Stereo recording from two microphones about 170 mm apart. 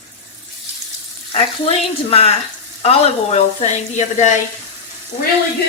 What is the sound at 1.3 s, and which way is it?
A woman's voice, 35° left (ahead or behind).